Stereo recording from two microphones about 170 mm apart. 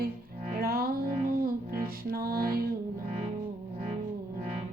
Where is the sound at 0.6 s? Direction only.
60° right (ahead or behind).